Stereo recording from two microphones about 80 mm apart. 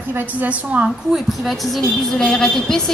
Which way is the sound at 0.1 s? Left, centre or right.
Centre.